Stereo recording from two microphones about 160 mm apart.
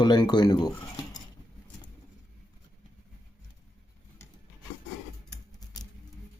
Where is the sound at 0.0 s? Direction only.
25° left (ahead or behind).